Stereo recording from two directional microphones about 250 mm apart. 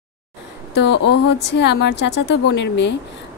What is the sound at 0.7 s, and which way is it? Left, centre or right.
A woman's voice, left.